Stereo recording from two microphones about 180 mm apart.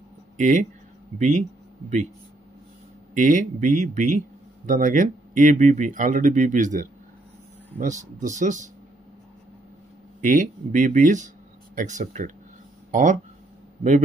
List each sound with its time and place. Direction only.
0.4 s speech: 45° right (ahead or behind)
3.2 s speech: 45° right (ahead or behind)
10.2 s speech: 45° right (ahead or behind)